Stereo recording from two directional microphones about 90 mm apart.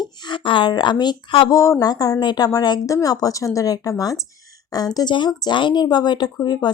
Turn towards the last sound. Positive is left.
turn(degrees=50)  # may be behind; listen again after turning